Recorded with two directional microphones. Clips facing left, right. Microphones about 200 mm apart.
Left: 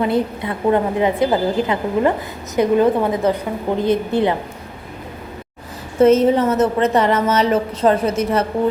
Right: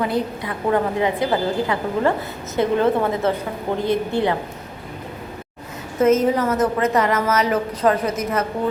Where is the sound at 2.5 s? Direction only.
15° left (ahead or behind).